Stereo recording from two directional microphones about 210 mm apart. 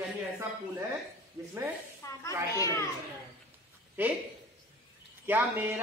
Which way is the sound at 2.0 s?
15° left (ahead or behind).